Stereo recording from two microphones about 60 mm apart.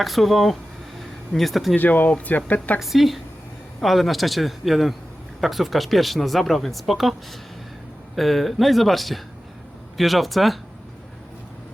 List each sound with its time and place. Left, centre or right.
0.0 s speech: centre
0.9 s a sound: centre
1.7 s speech: left
2.8 s speech: centre